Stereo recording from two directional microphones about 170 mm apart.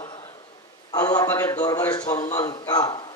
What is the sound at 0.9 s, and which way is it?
A man's voice, 20° left (ahead or behind).